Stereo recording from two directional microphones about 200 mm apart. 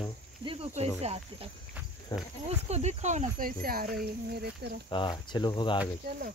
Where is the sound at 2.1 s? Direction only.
20° left (ahead or behind).